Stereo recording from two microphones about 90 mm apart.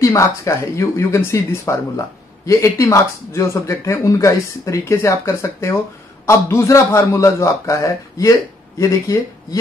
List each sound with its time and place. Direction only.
0.0 s speech: 35° left (ahead or behind)